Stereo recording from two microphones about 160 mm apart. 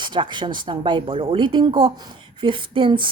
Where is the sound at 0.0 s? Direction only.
30° right (ahead or behind).